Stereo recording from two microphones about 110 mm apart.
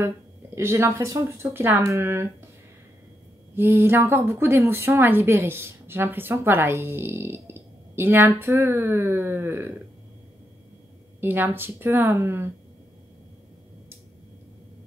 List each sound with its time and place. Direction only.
0.6 s speech: 25° right (ahead or behind)
3.5 s speech: 20° right (ahead or behind)
11.1 s speech: 20° right (ahead or behind)